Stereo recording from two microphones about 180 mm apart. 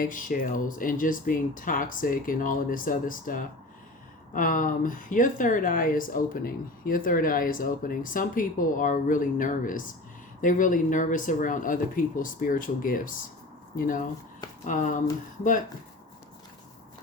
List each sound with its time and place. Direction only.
0.0 s speech: 45° left (ahead or behind)